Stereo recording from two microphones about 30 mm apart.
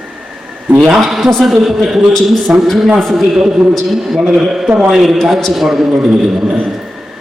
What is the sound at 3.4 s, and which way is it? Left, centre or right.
Speech, right.